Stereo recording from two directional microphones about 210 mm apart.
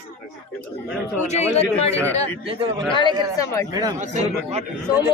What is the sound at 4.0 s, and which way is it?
Speech, 35° right (ahead or behind).